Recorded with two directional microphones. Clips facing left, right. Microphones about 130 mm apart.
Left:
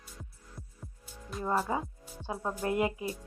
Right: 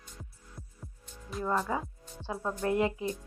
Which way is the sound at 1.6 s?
10° left (ahead or behind).